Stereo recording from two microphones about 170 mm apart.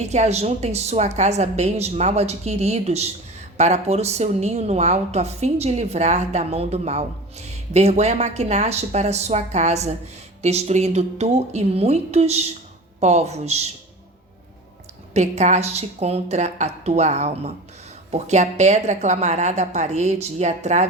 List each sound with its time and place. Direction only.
0.0 s a woman's voice: 40° right (ahead or behind)
15.1 s a woman's voice: 40° right (ahead or behind)